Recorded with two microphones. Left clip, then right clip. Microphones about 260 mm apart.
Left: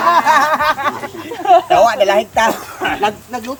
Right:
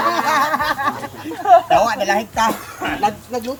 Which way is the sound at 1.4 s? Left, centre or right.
Left.